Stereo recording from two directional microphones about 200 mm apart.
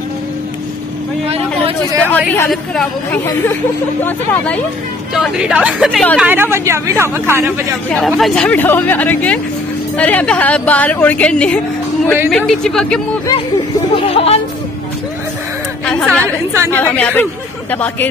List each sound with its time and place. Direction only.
2.0 s a woman's voice: 10° left (ahead or behind)
5.1 s a woman's voice: 5° right (ahead or behind)
8.1 s a woman's voice: 5° left (ahead or behind)
13.9 s speech: 30° left (ahead or behind)
15.8 s chatter: 5° left (ahead or behind)
16.7 s speech: 10° left (ahead or behind)